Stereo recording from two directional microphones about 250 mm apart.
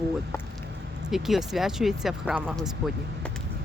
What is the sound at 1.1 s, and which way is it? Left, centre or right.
Speech, centre.